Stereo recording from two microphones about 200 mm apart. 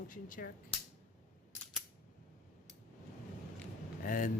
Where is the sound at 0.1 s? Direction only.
45° left (ahead or behind).